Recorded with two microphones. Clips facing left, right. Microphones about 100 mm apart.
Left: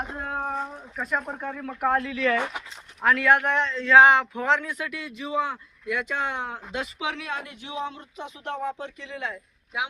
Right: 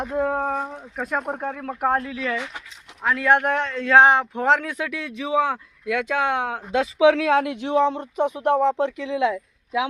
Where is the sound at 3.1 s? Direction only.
25° right (ahead or behind).